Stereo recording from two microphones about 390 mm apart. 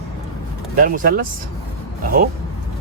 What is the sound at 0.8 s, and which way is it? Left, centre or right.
Speech, right.